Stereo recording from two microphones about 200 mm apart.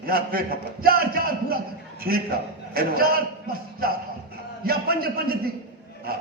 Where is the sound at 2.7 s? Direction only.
50° right (ahead or behind).